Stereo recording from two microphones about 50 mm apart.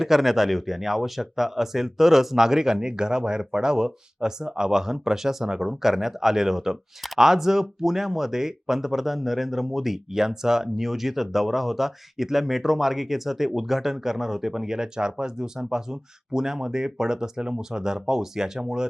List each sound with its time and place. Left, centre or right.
0.0 s speech: centre